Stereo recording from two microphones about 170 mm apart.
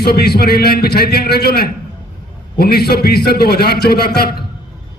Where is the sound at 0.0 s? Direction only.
65° left (ahead or behind).